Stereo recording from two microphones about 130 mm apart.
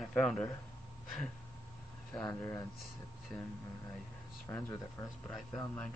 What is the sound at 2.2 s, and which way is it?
Speech, 25° left (ahead or behind).